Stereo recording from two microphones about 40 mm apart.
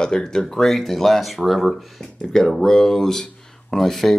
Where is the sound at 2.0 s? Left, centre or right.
Centre.